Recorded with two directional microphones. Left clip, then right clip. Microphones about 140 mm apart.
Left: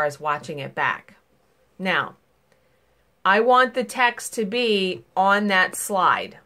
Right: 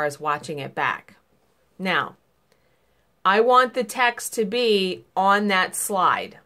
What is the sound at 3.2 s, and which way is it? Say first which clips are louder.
Speech: even; 15° right (ahead or behind).